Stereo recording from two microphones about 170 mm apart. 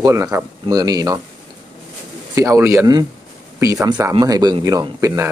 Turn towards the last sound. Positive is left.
turn(degrees=-15)  # may be behind; listen again after turning